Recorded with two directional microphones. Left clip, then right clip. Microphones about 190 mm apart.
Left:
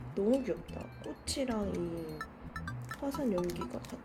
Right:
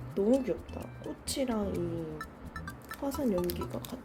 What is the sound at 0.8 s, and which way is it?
Speech, centre (ahead or behind).